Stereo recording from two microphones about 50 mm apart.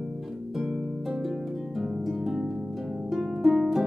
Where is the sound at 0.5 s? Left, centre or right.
Centre.